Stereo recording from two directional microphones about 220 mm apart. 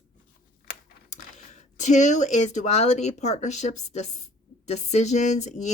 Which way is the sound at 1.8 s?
35° left (ahead or behind).